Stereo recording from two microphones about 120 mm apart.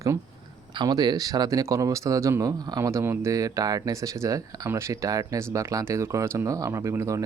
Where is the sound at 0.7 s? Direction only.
35° right (ahead or behind).